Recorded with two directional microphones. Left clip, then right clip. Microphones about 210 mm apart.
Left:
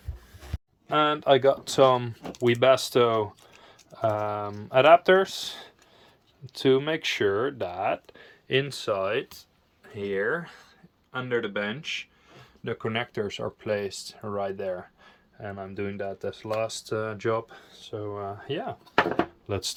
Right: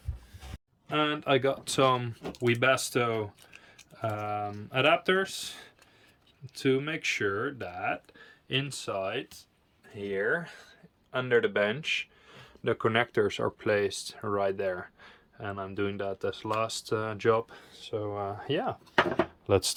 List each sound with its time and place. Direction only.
0.9 s speech: 5° left (ahead or behind)
11.1 s speech: 10° right (ahead or behind)